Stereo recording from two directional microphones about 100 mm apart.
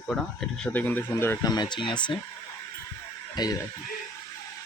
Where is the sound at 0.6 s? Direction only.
15° left (ahead or behind).